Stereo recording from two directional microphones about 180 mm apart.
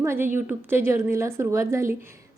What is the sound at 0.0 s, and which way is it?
A woman's voice, 15° right (ahead or behind).